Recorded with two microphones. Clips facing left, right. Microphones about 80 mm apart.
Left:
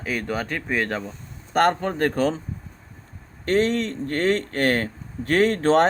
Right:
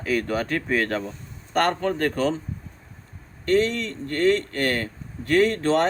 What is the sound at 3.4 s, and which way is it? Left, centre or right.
Speech, left.